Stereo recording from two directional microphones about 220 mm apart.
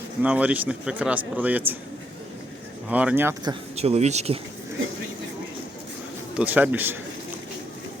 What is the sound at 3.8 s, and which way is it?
Speech, 30° right (ahead or behind).